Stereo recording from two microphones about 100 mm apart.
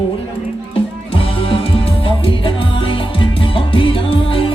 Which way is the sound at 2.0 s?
60° left (ahead or behind).